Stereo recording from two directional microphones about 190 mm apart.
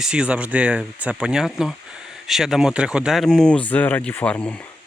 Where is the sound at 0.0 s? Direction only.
5° right (ahead or behind).